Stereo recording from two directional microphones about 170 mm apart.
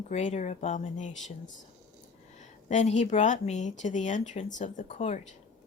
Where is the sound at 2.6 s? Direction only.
45° left (ahead or behind).